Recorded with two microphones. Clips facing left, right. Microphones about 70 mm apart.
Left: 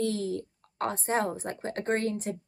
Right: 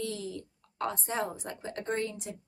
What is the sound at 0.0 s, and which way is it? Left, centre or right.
A woman's voice, left.